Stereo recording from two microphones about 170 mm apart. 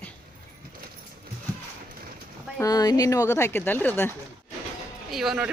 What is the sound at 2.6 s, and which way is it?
Speech, 20° left (ahead or behind).